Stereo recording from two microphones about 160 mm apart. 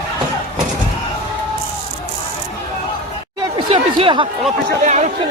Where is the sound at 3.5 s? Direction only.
35° right (ahead or behind).